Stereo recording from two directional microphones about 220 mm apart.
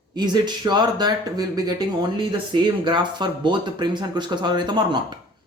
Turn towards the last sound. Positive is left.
turn(degrees=-20)  # may be behind; listen again after turning